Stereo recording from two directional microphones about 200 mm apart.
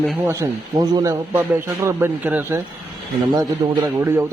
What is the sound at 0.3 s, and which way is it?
A man's voice, 15° right (ahead or behind).